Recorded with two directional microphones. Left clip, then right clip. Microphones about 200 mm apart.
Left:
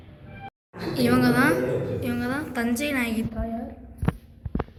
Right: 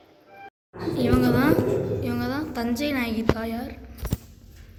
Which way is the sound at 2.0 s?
10° right (ahead or behind).